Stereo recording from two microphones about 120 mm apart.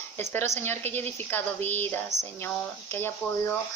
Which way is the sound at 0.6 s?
15° left (ahead or behind).